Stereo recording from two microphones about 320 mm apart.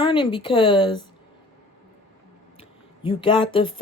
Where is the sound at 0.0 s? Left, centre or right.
Centre.